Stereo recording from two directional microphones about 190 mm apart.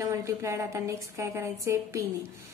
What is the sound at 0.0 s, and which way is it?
A woman's voice, 15° right (ahead or behind).